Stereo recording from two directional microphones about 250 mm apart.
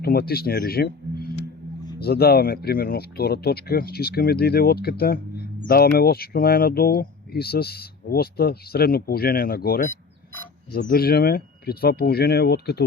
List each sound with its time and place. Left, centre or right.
0.0 s speech: left